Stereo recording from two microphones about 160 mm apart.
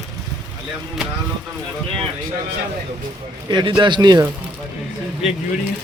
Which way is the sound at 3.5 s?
30° right (ahead or behind).